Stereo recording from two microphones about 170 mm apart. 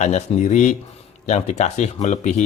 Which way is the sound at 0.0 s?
40° left (ahead or behind).